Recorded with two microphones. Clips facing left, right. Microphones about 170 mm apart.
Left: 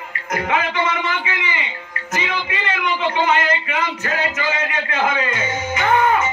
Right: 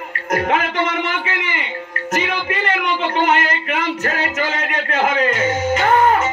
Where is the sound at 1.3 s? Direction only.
55° right (ahead or behind).